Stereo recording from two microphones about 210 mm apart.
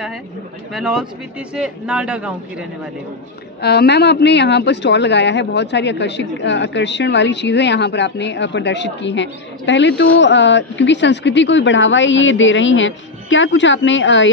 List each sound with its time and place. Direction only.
0.7 s a man's voice: centre (ahead or behind)
3.6 s a woman's voice: 50° left (ahead or behind)